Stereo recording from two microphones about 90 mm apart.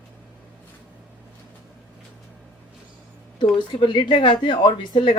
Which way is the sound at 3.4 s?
60° left (ahead or behind).